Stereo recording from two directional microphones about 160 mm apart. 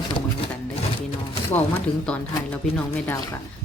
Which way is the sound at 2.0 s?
10° left (ahead or behind).